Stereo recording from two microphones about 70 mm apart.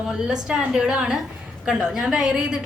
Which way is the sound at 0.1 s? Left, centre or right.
Centre.